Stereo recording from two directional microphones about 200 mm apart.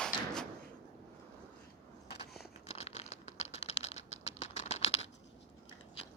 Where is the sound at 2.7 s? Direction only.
30° left (ahead or behind).